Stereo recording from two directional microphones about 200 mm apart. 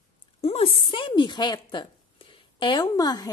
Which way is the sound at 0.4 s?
30° left (ahead or behind).